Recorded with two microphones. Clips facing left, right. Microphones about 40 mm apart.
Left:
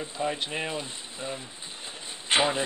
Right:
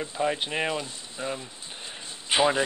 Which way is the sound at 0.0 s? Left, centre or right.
Centre.